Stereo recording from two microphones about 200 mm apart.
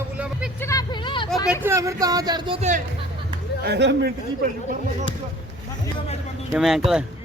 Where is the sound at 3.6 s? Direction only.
60° right (ahead or behind).